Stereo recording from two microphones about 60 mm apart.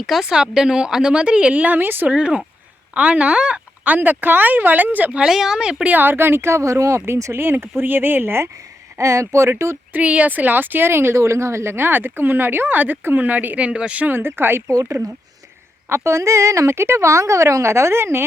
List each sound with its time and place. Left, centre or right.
0.0 s a woman's voice: centre; by 2.1 s right
2.1 s a woman's voice: centre
5.2 s a woman's voice: centre
5.9 s speech: right
7.3 s speech: right
9.0 s a woman's voice: right
9.9 s speech: right
14.1 s speech: right
15.9 s a woman's voice: right